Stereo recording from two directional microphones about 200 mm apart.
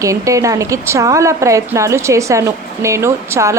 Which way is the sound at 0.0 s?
15° right (ahead or behind).